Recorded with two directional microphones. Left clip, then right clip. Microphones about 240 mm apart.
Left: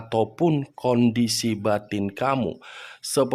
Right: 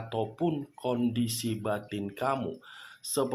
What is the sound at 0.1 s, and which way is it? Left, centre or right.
Speech, left.